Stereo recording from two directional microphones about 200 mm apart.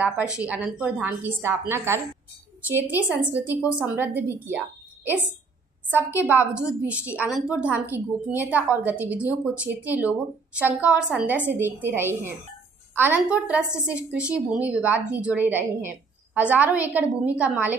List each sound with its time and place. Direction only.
0.0 s a woman's voice: 5° right (ahead or behind)